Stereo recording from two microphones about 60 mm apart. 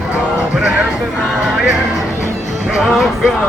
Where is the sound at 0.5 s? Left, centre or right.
Centre.